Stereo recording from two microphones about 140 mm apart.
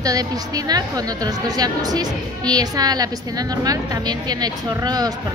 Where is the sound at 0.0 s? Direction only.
25° right (ahead or behind).